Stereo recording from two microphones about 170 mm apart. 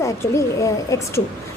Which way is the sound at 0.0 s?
15° left (ahead or behind).